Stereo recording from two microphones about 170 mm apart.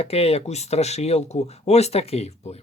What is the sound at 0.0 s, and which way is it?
Speech, 35° left (ahead or behind).